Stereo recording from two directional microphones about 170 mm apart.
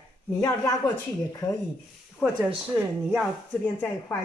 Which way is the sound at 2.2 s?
10° right (ahead or behind).